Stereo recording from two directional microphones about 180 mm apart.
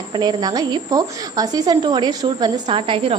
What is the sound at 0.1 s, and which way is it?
A woman's voice, 25° right (ahead or behind).